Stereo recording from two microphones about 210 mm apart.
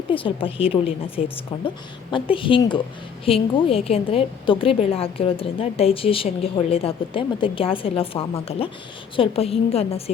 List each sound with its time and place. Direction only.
0.1 s a woman's voice: 25° left (ahead or behind)